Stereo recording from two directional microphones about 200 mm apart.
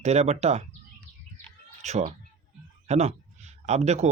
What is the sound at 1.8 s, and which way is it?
Speech, 35° right (ahead or behind).